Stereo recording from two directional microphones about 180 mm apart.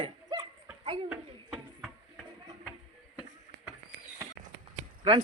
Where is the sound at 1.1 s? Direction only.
Centre (ahead or behind).